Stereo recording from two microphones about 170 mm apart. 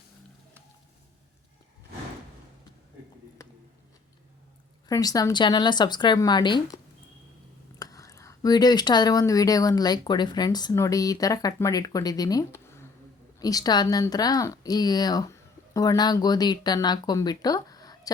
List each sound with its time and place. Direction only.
4.9 s speech: 20° left (ahead or behind)
7.8 s speech: 20° left (ahead or behind)